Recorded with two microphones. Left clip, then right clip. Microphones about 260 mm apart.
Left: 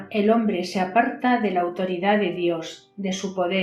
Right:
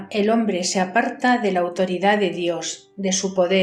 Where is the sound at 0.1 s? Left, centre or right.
Right.